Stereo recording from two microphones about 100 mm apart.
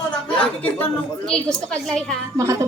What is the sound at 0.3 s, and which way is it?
A woman's voice, 15° left (ahead or behind).